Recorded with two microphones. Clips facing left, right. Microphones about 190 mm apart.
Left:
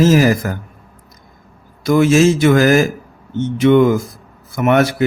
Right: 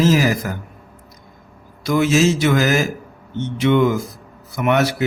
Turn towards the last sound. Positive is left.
turn(degrees=50)  # may be behind; listen again after turning